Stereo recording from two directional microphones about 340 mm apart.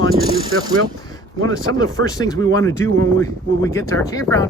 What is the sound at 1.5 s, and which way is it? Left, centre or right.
Speech, centre.